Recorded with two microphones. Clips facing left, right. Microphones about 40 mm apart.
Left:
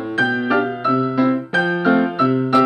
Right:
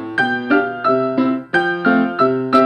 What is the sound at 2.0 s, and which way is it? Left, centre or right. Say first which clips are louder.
Music: right 2 dB; left.